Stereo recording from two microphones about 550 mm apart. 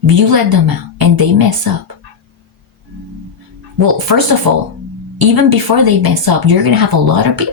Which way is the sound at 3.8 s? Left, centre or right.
Right.